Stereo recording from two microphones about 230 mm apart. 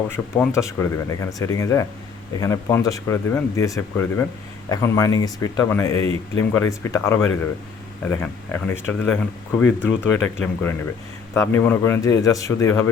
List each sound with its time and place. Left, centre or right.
0.3 s speech: centre